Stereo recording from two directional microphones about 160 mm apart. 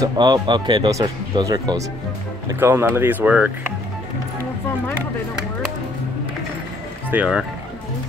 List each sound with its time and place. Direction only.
0.0 s speech: 25° right (ahead or behind); by 3.7 s 10° right (ahead or behind)
7.1 s speech: 5° right (ahead or behind)